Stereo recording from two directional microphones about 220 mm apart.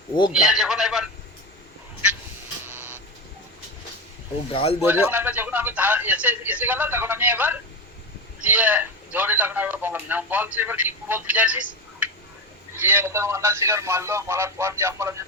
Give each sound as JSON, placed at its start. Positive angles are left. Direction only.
{"t": 0.4, "sound": "speech", "side_deg": 0}
{"t": 2.6, "sound": "printer", "side_deg": -10}
{"t": 4.5, "sound": "speech", "side_deg": 25}
{"t": 4.8, "sound": "speech", "side_deg": -10}
{"t": 12.8, "sound": "speech", "side_deg": -10}